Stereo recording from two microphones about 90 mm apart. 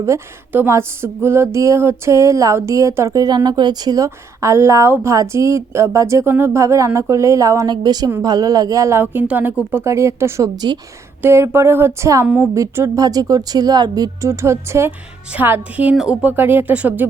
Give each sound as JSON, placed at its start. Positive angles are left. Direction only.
{"t": 0.5, "sound": "a woman's voice", "side_deg": -25}
{"t": 3.2, "sound": "a woman's voice", "side_deg": -50}
{"t": 7.7, "sound": "speech", "side_deg": -50}
{"t": 9.1, "sound": "speech", "side_deg": -20}
{"t": 9.7, "sound": "a woman's voice", "side_deg": -35}
{"t": 14.8, "sound": "speech", "side_deg": -20}